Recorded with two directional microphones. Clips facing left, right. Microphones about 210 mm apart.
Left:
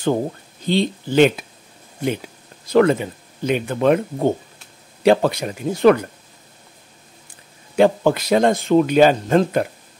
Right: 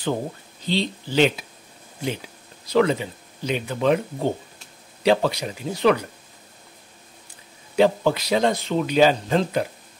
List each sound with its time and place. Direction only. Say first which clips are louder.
0.7 s speech: left 5 dB; 50° left (ahead or behind)
2.6 s speech: left 4 dB; 50° left (ahead or behind)
7.7 s speech: left 3 dB; 50° left (ahead or behind)